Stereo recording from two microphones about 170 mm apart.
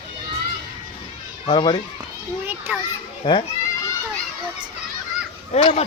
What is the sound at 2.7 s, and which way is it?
Speech, 10° right (ahead or behind).